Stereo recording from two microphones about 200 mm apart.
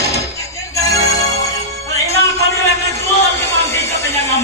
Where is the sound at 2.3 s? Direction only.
15° left (ahead or behind).